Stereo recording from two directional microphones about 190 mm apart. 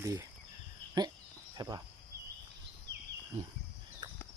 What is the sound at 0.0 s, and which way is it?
Speech, 15° right (ahead or behind).